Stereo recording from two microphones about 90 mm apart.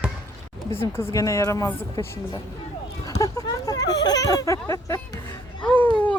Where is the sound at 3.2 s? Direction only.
45° left (ahead or behind).